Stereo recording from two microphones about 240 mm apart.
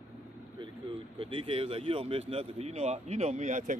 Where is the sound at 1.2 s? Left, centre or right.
Right.